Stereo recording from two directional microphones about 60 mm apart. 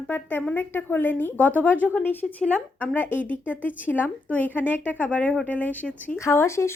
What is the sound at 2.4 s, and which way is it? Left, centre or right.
Speech, left.